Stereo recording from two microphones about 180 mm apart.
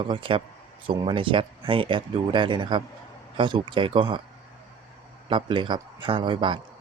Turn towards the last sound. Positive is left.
turn(degrees=-25)  # may be behind; listen again after turning